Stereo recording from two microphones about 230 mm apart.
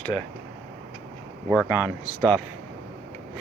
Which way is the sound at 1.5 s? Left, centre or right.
Centre.